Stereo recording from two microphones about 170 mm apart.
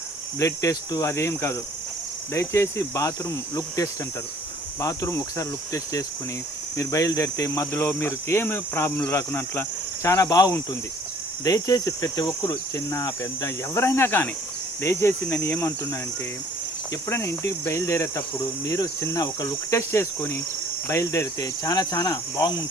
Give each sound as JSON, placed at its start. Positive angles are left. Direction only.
{"t": 0.3, "sound": "cricket", "side_deg": 20}
{"t": 6.7, "sound": "speech", "side_deg": 20}
{"t": 17.1, "sound": "speech", "side_deg": 15}
{"t": 20.8, "sound": "cricket", "side_deg": 15}